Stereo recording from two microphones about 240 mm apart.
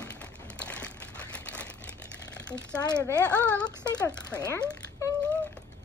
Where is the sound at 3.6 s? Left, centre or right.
Centre.